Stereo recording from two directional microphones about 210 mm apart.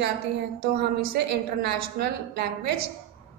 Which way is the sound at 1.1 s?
50° right (ahead or behind).